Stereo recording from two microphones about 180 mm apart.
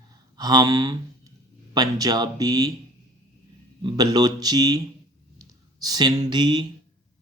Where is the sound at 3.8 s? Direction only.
25° right (ahead or behind).